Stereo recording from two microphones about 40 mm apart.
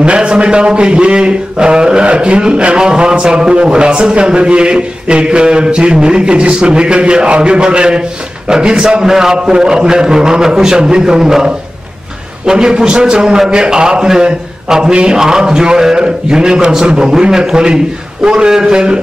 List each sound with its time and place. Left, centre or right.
0.0 s a man's voice: right